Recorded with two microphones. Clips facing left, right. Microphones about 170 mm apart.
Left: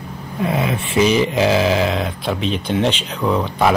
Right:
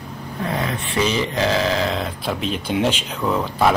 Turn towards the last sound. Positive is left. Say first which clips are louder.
# left 2 dB
turn(degrees=0)  # may be behind; listen again after turning